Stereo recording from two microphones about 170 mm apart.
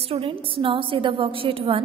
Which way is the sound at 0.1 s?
35° right (ahead or behind).